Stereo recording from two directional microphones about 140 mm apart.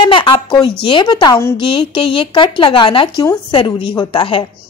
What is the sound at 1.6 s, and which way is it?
A woman's voice, 35° left (ahead or behind).